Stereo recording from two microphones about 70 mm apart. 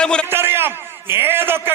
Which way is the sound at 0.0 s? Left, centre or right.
Centre.